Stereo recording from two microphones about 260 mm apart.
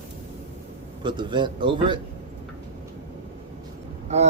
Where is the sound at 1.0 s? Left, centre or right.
Centre.